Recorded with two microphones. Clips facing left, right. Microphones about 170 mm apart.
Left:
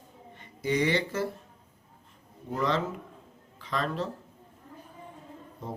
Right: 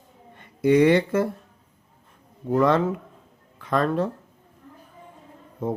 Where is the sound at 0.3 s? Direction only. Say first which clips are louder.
Right 10 dB; 55° right (ahead or behind).